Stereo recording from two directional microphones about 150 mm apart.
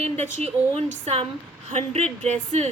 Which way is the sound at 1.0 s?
45° right (ahead or behind).